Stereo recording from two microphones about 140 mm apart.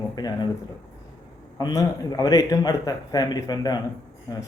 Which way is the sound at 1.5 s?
25° left (ahead or behind).